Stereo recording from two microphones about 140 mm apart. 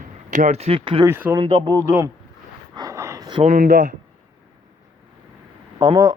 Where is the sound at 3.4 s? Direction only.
65° right (ahead or behind).